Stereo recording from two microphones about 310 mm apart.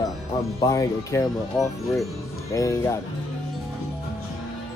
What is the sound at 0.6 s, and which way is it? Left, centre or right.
Speech, centre.